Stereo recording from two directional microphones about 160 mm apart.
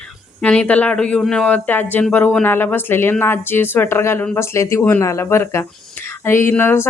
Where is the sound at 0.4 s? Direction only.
10° left (ahead or behind).